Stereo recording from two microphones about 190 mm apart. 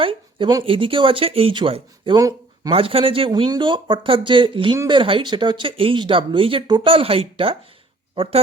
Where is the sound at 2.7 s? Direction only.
30° right (ahead or behind).